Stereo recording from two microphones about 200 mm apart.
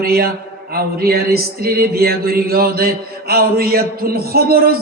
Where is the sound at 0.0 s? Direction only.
50° right (ahead or behind).